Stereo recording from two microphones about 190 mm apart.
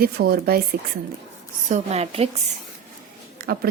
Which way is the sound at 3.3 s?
50° right (ahead or behind).